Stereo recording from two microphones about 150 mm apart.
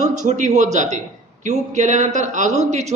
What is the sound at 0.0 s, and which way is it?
A man's voice, 50° right (ahead or behind).